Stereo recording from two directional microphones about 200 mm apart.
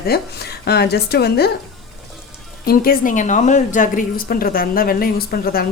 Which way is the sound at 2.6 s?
45° left (ahead or behind).